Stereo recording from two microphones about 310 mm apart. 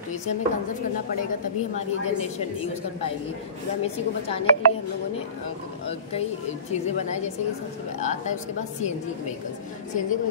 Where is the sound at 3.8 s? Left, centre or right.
Centre.